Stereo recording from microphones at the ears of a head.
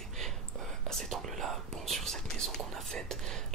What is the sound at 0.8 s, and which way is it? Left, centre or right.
Whispering, right.